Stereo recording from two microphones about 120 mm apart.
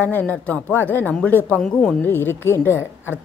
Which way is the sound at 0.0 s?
15° left (ahead or behind).